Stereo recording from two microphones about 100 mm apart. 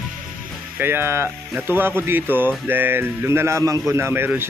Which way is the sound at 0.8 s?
25° right (ahead or behind).